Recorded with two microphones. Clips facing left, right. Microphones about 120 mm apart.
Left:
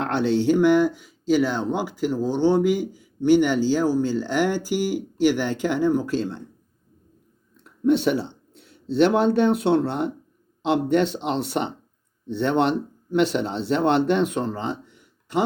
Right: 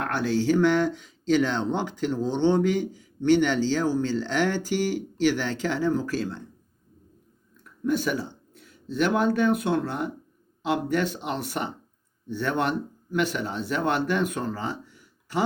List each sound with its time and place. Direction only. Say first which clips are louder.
0.0 s speech: left 4 dB; 25° left (ahead or behind)
7.5 s speech: left 6 dB; 25° left (ahead or behind)